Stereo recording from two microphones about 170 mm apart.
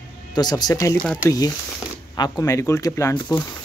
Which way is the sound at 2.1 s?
25° left (ahead or behind).